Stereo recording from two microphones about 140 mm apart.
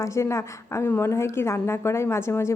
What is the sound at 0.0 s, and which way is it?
A woman's voice, 20° left (ahead or behind).